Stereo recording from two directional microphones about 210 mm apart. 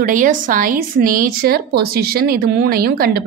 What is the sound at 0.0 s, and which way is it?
Speech, 40° right (ahead or behind).